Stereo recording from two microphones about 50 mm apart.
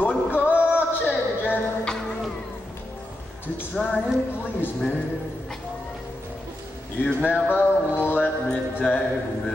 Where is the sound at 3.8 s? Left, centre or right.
Centre.